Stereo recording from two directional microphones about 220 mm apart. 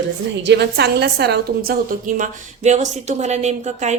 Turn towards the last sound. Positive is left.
turn(degrees=-30)  # may be behind; listen again after turning